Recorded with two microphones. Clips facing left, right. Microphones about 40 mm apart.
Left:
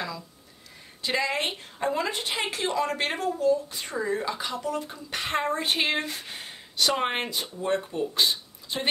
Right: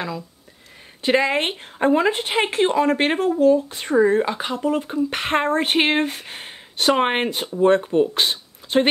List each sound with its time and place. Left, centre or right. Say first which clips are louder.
1.0 s speech: right 8 dB; right